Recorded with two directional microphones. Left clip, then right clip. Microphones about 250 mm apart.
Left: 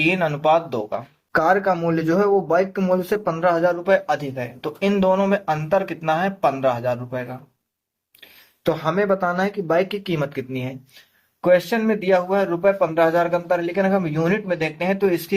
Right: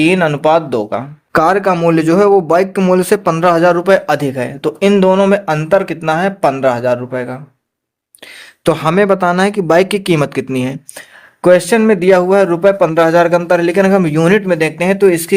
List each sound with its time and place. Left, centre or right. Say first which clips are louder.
0.0 s speech: right 8 dB; right
8.6 s speech: right 9 dB; right